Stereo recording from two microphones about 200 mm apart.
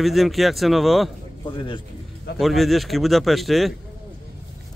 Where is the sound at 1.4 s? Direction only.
20° left (ahead or behind).